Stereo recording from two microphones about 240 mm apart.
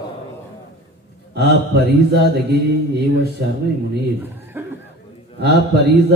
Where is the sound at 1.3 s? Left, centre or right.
Right.